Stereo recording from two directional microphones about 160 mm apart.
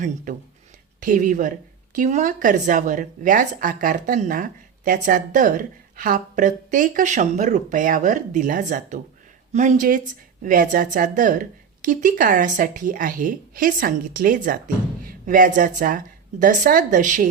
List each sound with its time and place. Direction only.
0.9 s a woman's voice: 55° right (ahead or behind)